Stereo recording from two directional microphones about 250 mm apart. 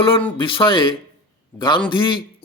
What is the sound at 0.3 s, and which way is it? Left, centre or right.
A man's voice, centre.